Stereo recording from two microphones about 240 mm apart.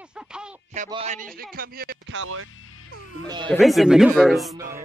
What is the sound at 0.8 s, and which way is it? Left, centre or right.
Speech, right.